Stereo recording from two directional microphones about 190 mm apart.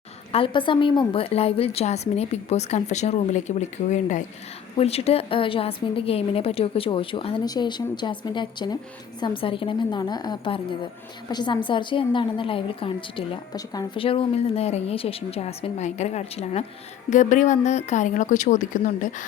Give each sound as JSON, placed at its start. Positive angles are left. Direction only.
{"t": 0.3, "sound": "a woman's voice", "side_deg": 30}